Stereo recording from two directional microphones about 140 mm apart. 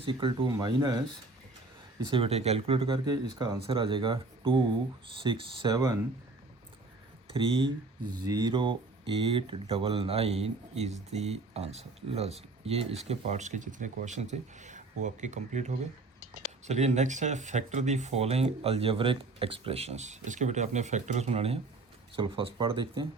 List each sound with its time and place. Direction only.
0.0 s speech: 40° right (ahead or behind)
2.0 s speech: 40° right (ahead or behind)
7.3 s speech: 40° right (ahead or behind)
8.2 s speech: 25° right (ahead or behind)